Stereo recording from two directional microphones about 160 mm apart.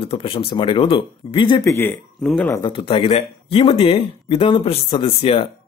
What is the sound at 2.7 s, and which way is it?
Speech, 30° left (ahead or behind).